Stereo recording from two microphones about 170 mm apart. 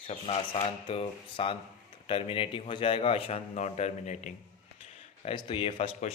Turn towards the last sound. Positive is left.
turn(degrees=35)  # may be behind; listen again after turning